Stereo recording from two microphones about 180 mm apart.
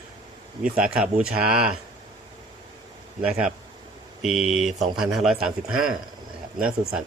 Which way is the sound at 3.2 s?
5° right (ahead or behind).